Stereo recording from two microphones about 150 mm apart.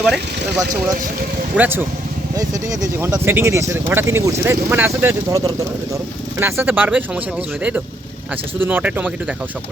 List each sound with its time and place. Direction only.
0.0 s speech: centre (ahead or behind)
1.5 s speech: 15° right (ahead or behind)
8.6 s speech: 10° right (ahead or behind)